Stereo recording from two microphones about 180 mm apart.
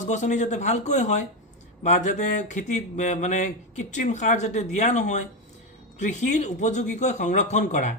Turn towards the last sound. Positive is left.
turn(degrees=40)  # may be behind; listen again after turning